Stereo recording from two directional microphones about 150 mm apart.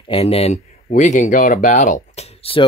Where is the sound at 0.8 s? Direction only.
55° left (ahead or behind).